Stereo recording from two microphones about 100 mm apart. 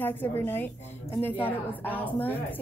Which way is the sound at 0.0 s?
20° left (ahead or behind).